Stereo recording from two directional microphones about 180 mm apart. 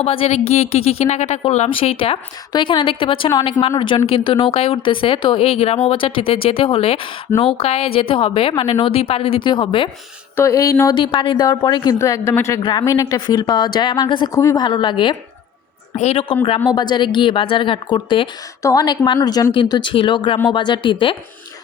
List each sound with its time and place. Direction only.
0.0 s speech: 35° left (ahead or behind)
10.3 s a woman's voice: 15° left (ahead or behind)
16.0 s speech: 35° left (ahead or behind)
16.6 s a woman's voice: 25° left (ahead or behind)